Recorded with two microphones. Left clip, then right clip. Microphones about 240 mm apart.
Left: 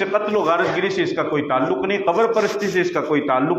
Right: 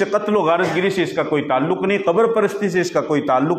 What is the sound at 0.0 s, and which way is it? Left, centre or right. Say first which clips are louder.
A man's voice: right 2 dB; right.